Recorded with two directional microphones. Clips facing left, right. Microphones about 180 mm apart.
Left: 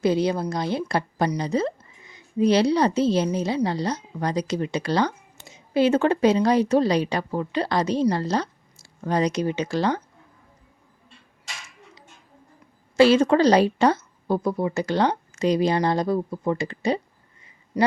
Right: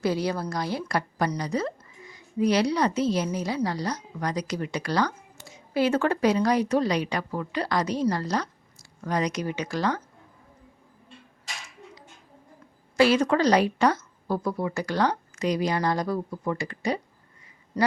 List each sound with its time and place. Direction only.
0.0 s speech: 20° left (ahead or behind)
13.0 s speech: 25° left (ahead or behind)
17.7 s speech: 10° left (ahead or behind)